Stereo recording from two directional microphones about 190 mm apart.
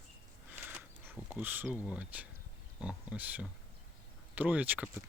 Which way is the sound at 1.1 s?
10° right (ahead or behind).